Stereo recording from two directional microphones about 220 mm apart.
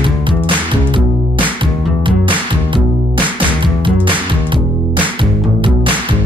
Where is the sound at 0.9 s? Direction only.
20° right (ahead or behind).